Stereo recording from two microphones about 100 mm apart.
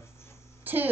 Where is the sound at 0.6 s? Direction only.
20° right (ahead or behind).